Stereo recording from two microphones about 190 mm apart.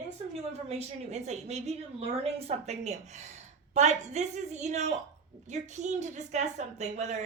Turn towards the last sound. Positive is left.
turn(degrees=-35)  # may be behind; listen again after turning